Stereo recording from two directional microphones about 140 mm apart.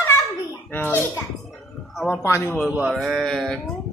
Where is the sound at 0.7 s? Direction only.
15° left (ahead or behind).